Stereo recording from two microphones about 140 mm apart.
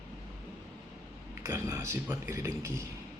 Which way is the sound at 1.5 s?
20° right (ahead or behind).